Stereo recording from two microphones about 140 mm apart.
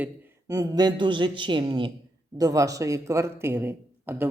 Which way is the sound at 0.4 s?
25° right (ahead or behind).